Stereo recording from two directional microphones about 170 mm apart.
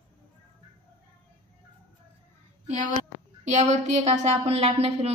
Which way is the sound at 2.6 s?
45° right (ahead or behind).